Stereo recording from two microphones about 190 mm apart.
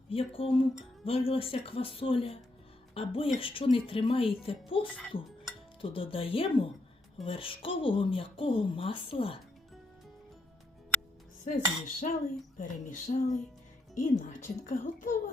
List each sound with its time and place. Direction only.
0.1 s speech: 30° left (ahead or behind)
11.4 s a woman's voice: 40° left (ahead or behind)
12.5 s a sound: 40° left (ahead or behind)
13.9 s a woman's voice: 40° left (ahead or behind)